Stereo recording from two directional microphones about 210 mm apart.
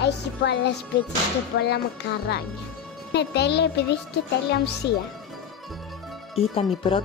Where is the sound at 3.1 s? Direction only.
50° left (ahead or behind).